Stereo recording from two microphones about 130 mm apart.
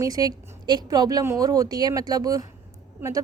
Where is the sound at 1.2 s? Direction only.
20° right (ahead or behind).